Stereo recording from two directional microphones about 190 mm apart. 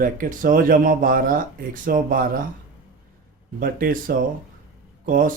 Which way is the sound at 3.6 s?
50° right (ahead or behind).